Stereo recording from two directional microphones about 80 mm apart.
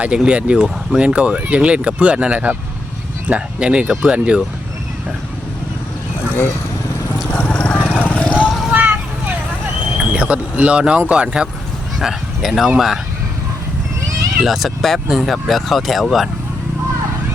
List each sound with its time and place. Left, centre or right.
0.0 s speech: centre
7.3 s vehicle: centre
8.4 s vehicle: centre
8.7 s a sound: centre
10.0 s vehicle: centre
11.1 s speech: centre
14.4 s speech: centre